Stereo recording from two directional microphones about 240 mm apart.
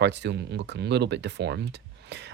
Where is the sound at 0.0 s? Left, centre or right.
Right.